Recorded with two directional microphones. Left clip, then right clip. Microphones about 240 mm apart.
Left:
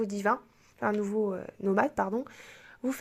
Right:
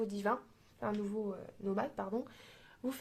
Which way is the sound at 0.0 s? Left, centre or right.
Left.